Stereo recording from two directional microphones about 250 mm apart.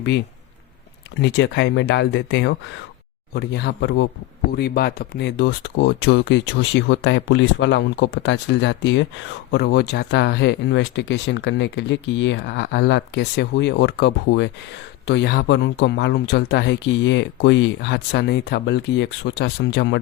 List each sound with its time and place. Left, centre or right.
1.2 s speech: left